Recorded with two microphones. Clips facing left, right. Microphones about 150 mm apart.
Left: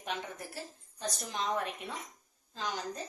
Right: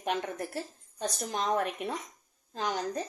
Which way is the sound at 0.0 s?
55° right (ahead or behind).